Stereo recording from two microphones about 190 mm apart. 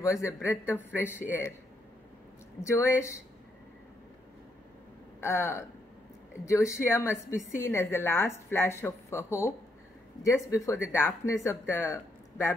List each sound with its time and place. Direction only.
0.0 s a woman's voice: 15° left (ahead or behind)
2.6 s a woman's voice: 15° left (ahead or behind)
5.2 s a woman's voice: 15° left (ahead or behind)